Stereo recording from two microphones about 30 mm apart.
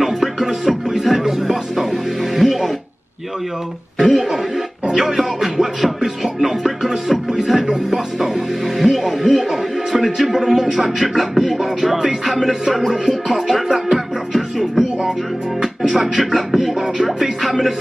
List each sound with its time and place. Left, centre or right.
0.0 s music: centre
4.0 s speech: centre
6.8 s music: centre
7.9 s speech: centre
11.8 s music: centre
16.7 s speech: centre
17.4 s music: centre